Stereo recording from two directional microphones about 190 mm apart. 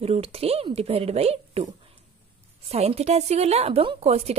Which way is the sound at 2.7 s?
35° right (ahead or behind).